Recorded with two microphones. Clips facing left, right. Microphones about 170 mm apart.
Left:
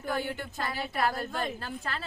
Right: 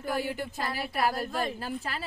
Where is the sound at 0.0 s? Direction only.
5° right (ahead or behind).